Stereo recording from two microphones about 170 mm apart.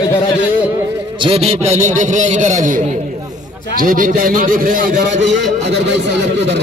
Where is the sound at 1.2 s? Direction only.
35° right (ahead or behind); by 4.9 s 55° right (ahead or behind).